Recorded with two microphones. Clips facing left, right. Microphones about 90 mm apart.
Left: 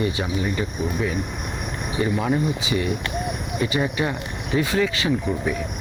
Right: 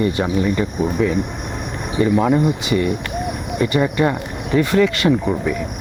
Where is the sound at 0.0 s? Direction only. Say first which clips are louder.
Right 6 dB; 55° right (ahead or behind).